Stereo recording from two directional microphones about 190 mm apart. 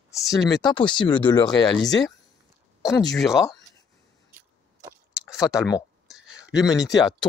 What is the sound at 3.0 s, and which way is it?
Speech, centre (ahead or behind).